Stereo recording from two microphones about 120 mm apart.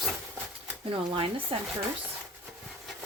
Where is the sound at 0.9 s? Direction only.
45° right (ahead or behind).